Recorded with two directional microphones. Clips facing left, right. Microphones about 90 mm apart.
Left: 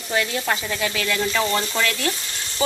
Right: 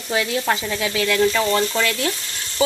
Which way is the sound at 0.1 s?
5° right (ahead or behind).